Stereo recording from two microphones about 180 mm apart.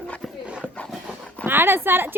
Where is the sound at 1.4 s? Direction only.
10° right (ahead or behind).